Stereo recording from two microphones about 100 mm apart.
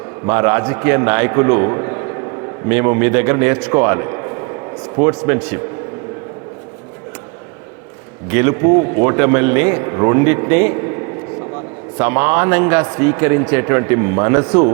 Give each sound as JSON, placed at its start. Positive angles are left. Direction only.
{"t": 0.3, "sound": "a man's voice", "side_deg": -30}
{"t": 8.3, "sound": "a man's voice", "side_deg": -25}
{"t": 11.9, "sound": "a man's voice", "side_deg": -25}